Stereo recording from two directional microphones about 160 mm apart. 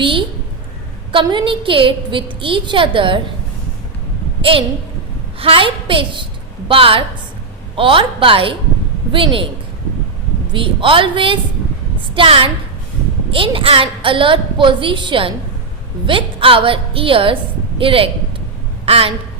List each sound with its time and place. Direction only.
0.0 s a sound: 35° right (ahead or behind)
1.1 s a woman's voice: 30° right (ahead or behind)
4.5 s a woman's voice: 35° right (ahead or behind)
10.5 s a woman's voice: 35° right (ahead or behind)